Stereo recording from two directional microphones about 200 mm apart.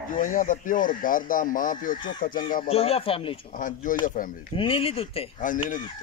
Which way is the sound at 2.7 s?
30° left (ahead or behind).